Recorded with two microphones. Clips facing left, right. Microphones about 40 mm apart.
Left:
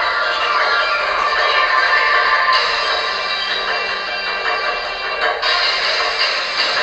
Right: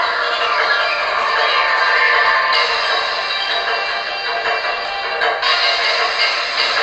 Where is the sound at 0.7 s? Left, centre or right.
Right.